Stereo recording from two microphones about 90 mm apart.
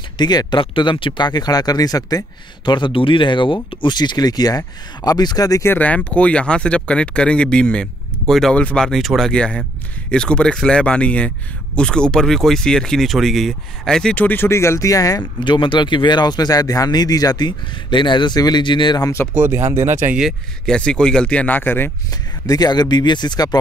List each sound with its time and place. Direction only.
0.2 s speech: 50° left (ahead or behind)
0.6 s speech: 65° left (ahead or behind); by 5.7 s 40° left (ahead or behind)
5.7 s speech: 15° left (ahead or behind)
14.1 s speech: 20° left (ahead or behind); by 15.2 s 40° left (ahead or behind)
15.4 s speech: 60° left (ahead or behind)
19.4 s speech: 30° right (ahead or behind)
20.6 s speech: 10° left (ahead or behind)
22.5 s speech: 50° left (ahead or behind)